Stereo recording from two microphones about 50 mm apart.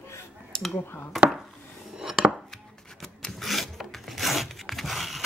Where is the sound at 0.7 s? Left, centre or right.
Left.